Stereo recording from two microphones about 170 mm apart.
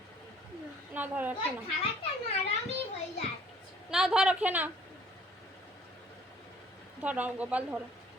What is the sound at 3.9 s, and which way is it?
Speech, 5° right (ahead or behind).